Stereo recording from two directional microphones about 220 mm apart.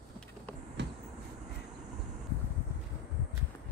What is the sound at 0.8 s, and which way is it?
Vehicle, 50° right (ahead or behind).